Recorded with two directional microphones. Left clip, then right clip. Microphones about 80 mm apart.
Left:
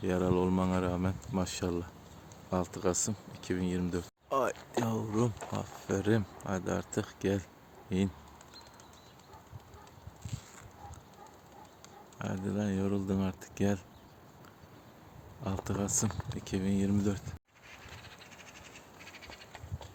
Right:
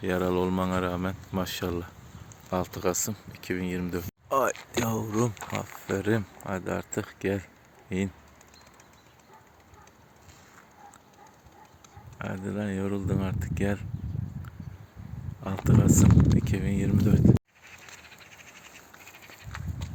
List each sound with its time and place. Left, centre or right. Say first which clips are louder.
0.0 s speech: right 4 dB; centre
4.3 s a sound: right 6 dB; right
6.0 s speech: right 2 dB; right
12.2 s speech: right 3 dB; centre
15.4 s speech: right 9 dB; centre